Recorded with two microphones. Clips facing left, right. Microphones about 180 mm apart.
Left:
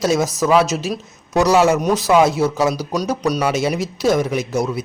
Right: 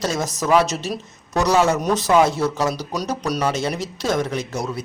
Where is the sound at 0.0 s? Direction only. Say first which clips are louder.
Left 6 dB; 5° left (ahead or behind).